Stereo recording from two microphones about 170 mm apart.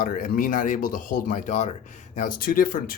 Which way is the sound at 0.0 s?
55° left (ahead or behind).